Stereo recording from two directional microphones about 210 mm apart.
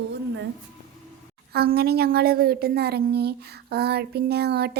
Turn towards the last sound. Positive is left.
turn(degrees=-50)  # may be behind; listen again after turning